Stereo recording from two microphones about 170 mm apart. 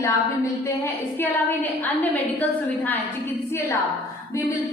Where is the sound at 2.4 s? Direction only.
10° left (ahead or behind).